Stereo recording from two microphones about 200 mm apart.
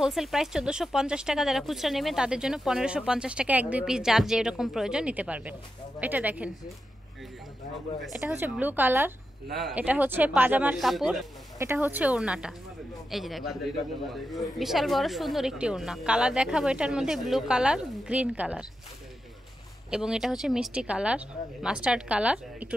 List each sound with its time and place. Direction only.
0.0 s speech: centre (ahead or behind)
8.0 s speech: 5° right (ahead or behind)
11.5 s speech: 10° right (ahead or behind)
14.6 s speech: centre (ahead or behind)
19.9 s speech: 5° right (ahead or behind)